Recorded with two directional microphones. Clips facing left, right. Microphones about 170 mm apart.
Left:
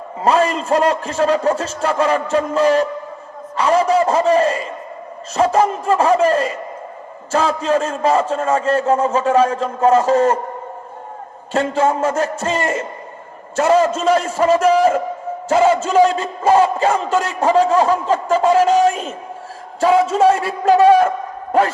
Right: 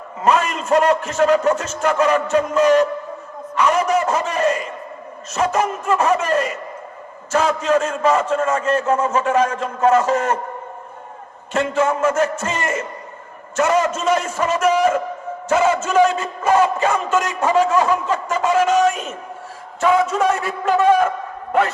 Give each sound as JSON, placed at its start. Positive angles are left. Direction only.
{"t": 0.2, "sound": "a man's voice", "side_deg": 30}
{"t": 11.5, "sound": "a man's voice", "side_deg": 35}